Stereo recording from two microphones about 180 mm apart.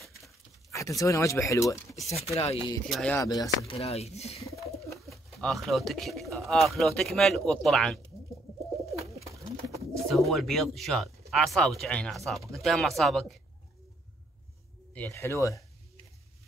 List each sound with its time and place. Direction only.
0.7 s speech: 15° left (ahead or behind)
2.3 s speech: 35° left (ahead or behind)
2.9 s speech: 5° left (ahead or behind)
3.2 s speech: 20° left (ahead or behind)
3.7 s speech: 35° left (ahead or behind)
4.5 s bird: 15° left (ahead or behind)
4.9 s speech: centre (ahead or behind)
10.0 s speech: centre (ahead or behind)
15.0 s speech: 15° left (ahead or behind)